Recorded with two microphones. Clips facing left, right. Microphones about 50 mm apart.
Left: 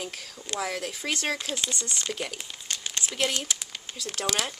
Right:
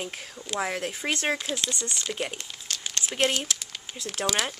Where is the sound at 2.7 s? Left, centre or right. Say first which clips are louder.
Even; centre.